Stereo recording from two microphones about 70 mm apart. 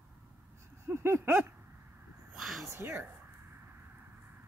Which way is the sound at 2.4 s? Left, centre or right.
Centre.